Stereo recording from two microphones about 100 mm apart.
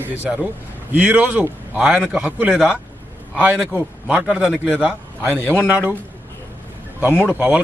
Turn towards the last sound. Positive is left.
turn(degrees=-15)  # may be behind; listen again after turning